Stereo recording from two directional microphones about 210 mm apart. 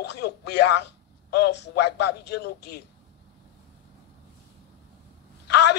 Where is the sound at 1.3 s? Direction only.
55° left (ahead or behind).